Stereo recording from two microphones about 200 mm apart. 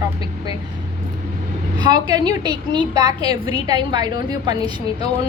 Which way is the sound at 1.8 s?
20° right (ahead or behind).